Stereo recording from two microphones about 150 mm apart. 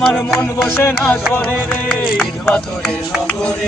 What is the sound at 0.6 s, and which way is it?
Music, 15° left (ahead or behind).